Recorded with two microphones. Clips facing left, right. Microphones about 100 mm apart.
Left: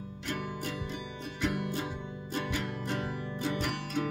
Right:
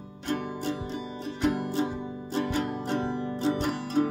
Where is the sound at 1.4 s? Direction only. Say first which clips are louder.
Right 6 dB; 35° right (ahead or behind).